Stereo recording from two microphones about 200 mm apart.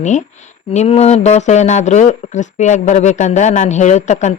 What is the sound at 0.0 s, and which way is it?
Speech, 35° left (ahead or behind).